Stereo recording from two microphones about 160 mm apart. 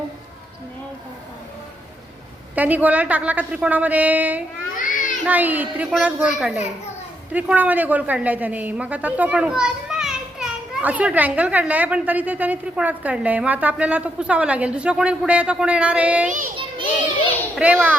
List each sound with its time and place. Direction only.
2.6 s a woman's voice: 10° right (ahead or behind)
4.7 s a sound: 55° left (ahead or behind)
5.2 s a woman's voice: 10° right (ahead or behind)
17.6 s a woman's voice: 10° right (ahead or behind)